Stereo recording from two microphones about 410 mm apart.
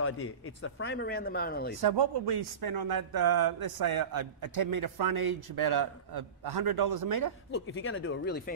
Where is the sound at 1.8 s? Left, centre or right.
Right.